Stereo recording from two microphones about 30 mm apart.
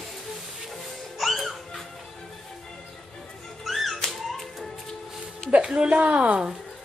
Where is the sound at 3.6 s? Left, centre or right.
Centre.